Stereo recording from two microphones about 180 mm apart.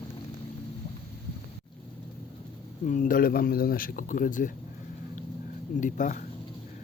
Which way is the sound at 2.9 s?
50° left (ahead or behind).